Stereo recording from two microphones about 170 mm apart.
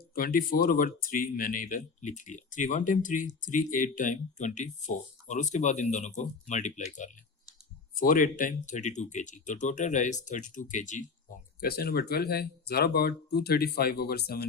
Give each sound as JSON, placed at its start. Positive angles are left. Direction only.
{"t": 0.1, "sound": "speech", "side_deg": 55}
{"t": 7.9, "sound": "speech", "side_deg": 55}
{"t": 11.6, "sound": "speech", "side_deg": 65}